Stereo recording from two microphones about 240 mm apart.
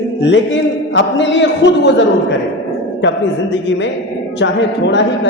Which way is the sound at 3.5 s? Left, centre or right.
Left.